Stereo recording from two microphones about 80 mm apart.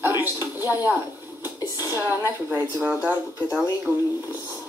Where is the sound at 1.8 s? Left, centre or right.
Right.